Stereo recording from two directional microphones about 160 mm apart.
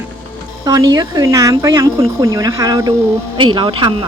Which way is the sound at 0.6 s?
25° right (ahead or behind).